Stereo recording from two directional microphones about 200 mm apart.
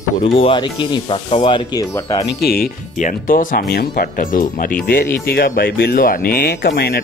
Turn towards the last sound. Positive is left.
turn(degrees=55)  # may be behind; listen again after turning